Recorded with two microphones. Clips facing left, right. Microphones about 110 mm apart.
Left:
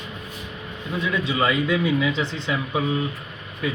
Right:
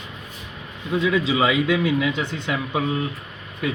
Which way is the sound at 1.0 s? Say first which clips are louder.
Right 4 dB; 90° right.